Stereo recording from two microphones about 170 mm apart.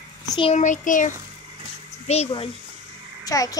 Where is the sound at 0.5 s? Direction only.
45° left (ahead or behind).